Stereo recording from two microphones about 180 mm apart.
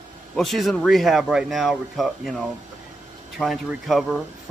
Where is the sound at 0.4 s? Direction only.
Centre (ahead or behind).